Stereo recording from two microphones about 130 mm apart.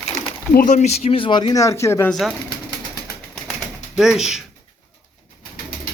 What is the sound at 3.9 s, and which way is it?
Speech, 5° right (ahead or behind).